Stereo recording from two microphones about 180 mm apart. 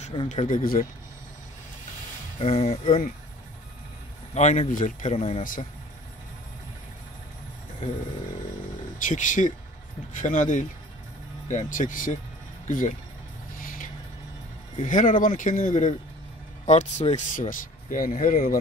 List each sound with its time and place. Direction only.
0.0 s a sound: 30° left (ahead or behind)
0.3 s speech: 45° left (ahead or behind)
2.3 s speech: 35° left (ahead or behind)
4.3 s speech: 40° left (ahead or behind)
5.4 s speech: 50° left (ahead or behind)
8.9 s speech: 45° left (ahead or behind)
13.6 s vehicle: 50° left (ahead or behind)
14.8 s speech: 45° left (ahead or behind)